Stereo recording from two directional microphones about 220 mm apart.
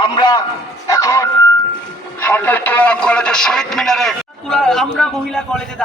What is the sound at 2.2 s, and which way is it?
Speech, 10° left (ahead or behind).